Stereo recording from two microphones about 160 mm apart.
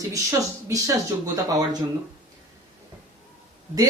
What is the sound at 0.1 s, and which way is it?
Speech, 20° right (ahead or behind).